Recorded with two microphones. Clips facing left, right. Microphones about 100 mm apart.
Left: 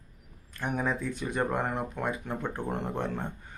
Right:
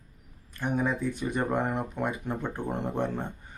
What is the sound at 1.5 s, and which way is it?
Speech, centre (ahead or behind).